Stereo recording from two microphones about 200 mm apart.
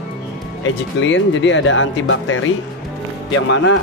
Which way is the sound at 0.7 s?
65° left (ahead or behind).